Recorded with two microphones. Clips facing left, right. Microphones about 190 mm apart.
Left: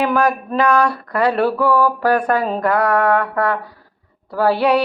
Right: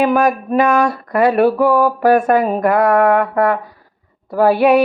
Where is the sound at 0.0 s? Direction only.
20° right (ahead or behind).